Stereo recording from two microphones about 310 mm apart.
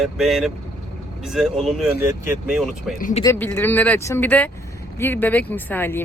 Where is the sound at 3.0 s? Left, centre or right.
Left.